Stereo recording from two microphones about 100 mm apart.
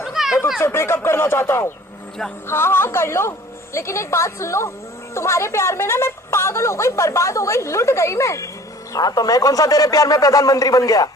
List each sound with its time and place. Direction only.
0.0 s chatter: 5° right (ahead or behind)
0.6 s a woman's voice: 25° left (ahead or behind)